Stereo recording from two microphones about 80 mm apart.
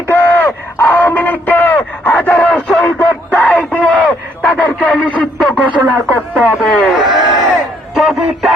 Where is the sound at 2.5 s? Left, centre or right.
Centre.